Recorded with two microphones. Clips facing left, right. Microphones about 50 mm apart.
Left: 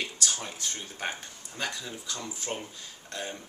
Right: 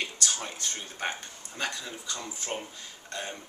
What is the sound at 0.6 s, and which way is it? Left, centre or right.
Speech, centre.